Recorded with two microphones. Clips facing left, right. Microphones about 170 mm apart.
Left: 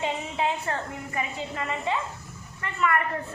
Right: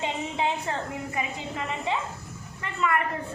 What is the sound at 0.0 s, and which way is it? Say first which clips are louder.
A woman's voice: even; 20° right (ahead or behind).